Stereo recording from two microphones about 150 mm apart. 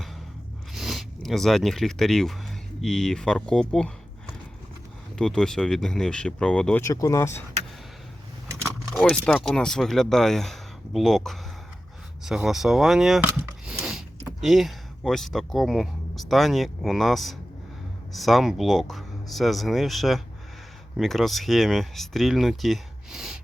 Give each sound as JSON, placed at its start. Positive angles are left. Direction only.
{"t": 0.7, "sound": "speech", "side_deg": 0}
{"t": 5.1, "sound": "speech", "side_deg": 5}
{"t": 6.8, "sound": "speech", "side_deg": 20}
{"t": 8.9, "sound": "speech", "side_deg": 5}
{"t": 13.2, "sound": "a sound", "side_deg": -10}
{"t": 14.4, "sound": "speech", "side_deg": 0}